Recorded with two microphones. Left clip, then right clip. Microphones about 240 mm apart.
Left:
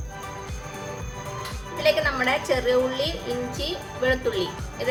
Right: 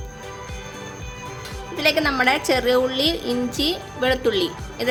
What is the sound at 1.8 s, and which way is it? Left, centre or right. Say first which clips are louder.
A woman's voice: right 3 dB; right.